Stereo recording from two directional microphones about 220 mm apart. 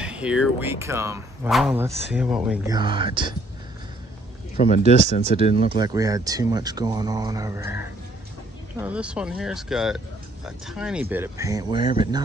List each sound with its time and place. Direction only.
0.0 s speech: 5° right (ahead or behind)
1.5 s speech: centre (ahead or behind)
2.7 s speech: 20° right (ahead or behind)
4.6 s speech: 35° left (ahead or behind)
5.7 s speech: 20° right (ahead or behind)